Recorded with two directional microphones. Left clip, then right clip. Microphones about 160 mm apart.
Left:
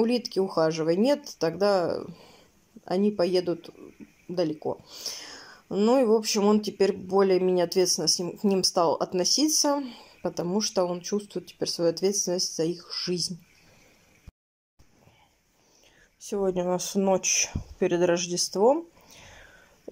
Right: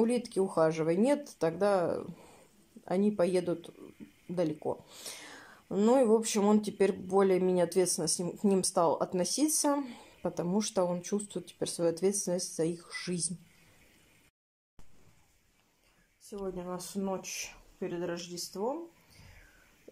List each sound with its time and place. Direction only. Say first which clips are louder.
0.0 s speech: left 4 dB; 5° left (ahead or behind)
16.3 s speech: left 13 dB; 50° left (ahead or behind)